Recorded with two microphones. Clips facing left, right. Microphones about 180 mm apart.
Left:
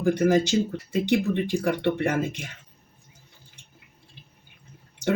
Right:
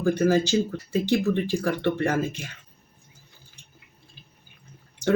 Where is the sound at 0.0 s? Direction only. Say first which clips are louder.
Even; 20° left (ahead or behind).